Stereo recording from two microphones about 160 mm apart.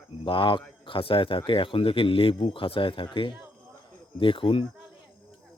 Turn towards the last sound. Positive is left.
turn(degrees=35)  # may be behind; listen again after turning